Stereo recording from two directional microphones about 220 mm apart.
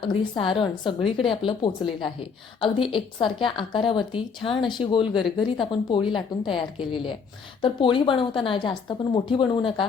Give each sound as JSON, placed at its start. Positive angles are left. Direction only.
{"t": 0.0, "sound": "a woman's voice", "side_deg": 20}